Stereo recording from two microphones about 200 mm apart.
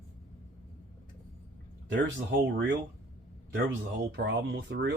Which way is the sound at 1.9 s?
60° right (ahead or behind).